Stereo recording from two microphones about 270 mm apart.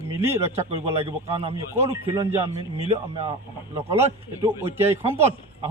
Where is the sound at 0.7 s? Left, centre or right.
Right.